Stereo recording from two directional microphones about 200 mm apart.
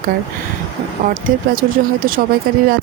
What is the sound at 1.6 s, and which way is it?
Speech, 45° right (ahead or behind).